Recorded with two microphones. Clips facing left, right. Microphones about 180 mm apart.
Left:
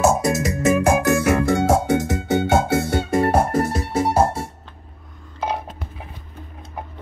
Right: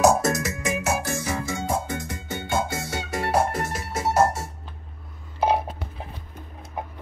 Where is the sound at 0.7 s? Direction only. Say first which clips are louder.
Left 11 dB; 50° left (ahead or behind).